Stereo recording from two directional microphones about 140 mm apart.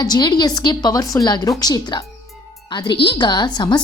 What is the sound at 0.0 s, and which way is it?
A woman's voice, 30° left (ahead or behind).